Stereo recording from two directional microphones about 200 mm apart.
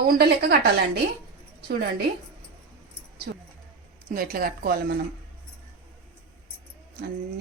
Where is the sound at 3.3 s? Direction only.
55° right (ahead or behind).